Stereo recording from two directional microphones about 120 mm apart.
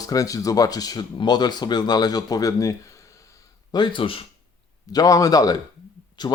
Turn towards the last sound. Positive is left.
turn(degrees=35)  # may be behind; listen again after turning